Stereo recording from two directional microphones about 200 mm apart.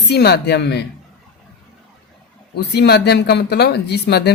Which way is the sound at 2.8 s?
55° left (ahead or behind).